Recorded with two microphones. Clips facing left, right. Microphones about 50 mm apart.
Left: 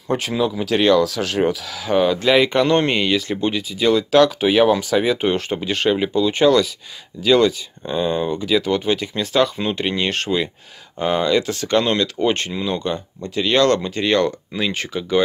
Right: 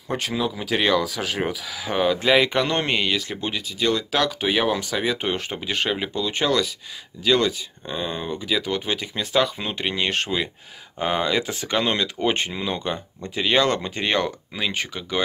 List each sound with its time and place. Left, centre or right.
0.1 s speech: centre
14.5 s speech: centre